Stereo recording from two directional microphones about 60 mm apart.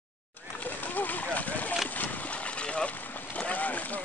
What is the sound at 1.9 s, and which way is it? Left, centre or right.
Boat, left.